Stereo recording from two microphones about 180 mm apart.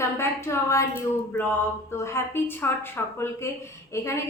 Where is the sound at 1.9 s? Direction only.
15° left (ahead or behind).